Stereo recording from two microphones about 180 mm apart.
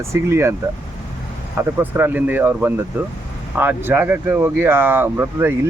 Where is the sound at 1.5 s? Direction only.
10° right (ahead or behind).